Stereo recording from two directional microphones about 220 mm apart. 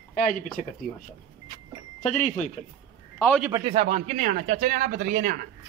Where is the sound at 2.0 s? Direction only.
35° left (ahead or behind).